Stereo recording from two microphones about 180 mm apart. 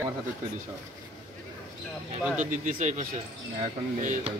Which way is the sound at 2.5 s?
45° right (ahead or behind).